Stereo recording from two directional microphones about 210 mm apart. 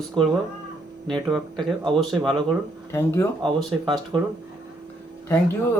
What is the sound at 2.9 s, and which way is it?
Speech, 10° left (ahead or behind).